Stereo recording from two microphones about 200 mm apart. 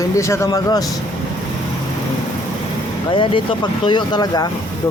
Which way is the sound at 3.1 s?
25° left (ahead or behind).